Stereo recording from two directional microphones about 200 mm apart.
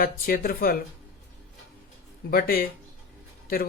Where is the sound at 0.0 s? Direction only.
45° left (ahead or behind).